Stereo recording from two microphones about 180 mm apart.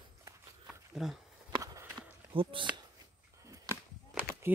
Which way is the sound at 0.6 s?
Centre (ahead or behind).